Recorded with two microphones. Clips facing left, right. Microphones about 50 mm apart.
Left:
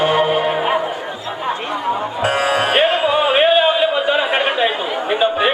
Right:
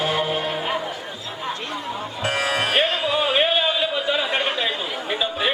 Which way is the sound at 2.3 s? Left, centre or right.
Centre.